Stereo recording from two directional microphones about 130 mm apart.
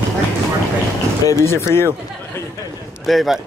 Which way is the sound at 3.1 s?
Centre (ahead or behind).